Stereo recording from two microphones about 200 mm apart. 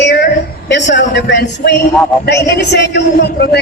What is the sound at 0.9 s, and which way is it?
Speech, 60° left (ahead or behind).